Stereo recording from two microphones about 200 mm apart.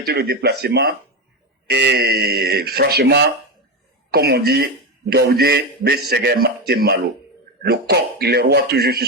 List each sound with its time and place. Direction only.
0.0 s speech: 50° right (ahead or behind)